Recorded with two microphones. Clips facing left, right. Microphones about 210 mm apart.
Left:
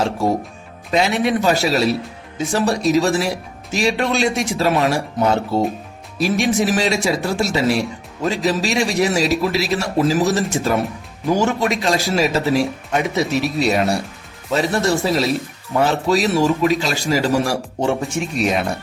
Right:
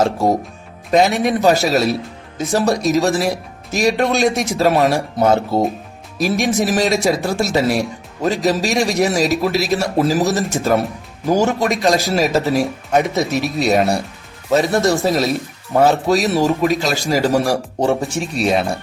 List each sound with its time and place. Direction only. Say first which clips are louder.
0.9 s a man's voice: right 3 dB; 40° right (ahead or behind)